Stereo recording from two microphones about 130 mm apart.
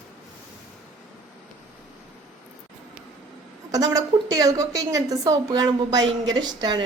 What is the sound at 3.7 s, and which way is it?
A woman's voice, 30° right (ahead or behind).